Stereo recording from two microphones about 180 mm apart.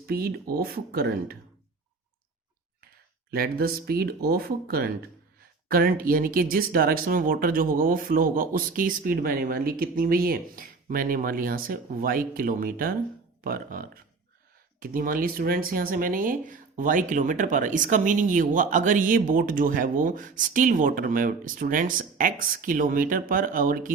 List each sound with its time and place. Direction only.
0.0 s speech: 55° right (ahead or behind)
3.3 s speech: 55° right (ahead or behind)